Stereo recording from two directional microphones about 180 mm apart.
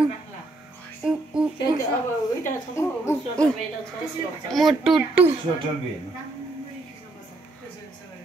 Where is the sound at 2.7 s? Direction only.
15° left (ahead or behind).